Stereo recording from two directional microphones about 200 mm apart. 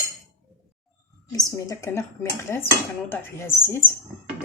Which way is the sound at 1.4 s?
15° left (ahead or behind).